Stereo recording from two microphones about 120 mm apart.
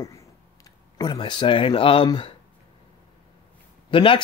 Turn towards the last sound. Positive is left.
turn(degrees=45)  # may be behind; listen again after turning